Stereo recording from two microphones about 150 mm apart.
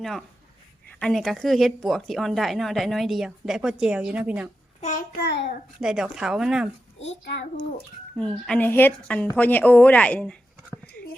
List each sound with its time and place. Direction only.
0.0 s speech: centre (ahead or behind)
4.8 s a child's voice: 60° left (ahead or behind); by 5.6 s 80° left
5.8 s speech: 5° right (ahead or behind)
8.1 s a woman's voice: 5° left (ahead or behind)